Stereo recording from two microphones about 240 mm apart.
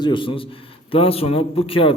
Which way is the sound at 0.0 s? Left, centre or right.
Centre.